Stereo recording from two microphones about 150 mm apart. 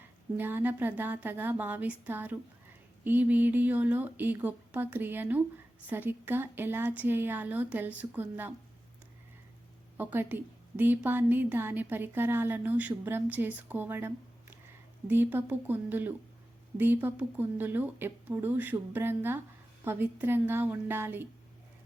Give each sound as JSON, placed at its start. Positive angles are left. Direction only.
{"t": 0.3, "sound": "a woman's voice", "side_deg": -15}
{"t": 10.0, "sound": "a woman's voice", "side_deg": -15}